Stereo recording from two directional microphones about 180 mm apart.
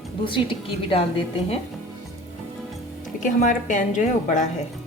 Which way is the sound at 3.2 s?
45° left (ahead or behind).